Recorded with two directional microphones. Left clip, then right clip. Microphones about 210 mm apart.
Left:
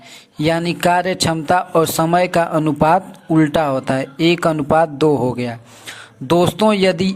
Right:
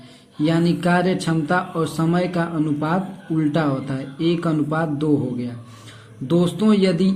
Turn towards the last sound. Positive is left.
turn(degrees=35)  # may be behind; listen again after turning